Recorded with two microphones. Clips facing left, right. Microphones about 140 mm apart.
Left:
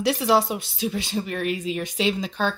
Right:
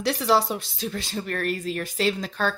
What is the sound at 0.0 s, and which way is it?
Speech, 5° left (ahead or behind).